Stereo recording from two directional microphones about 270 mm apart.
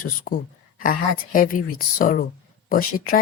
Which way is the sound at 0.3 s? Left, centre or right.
Left.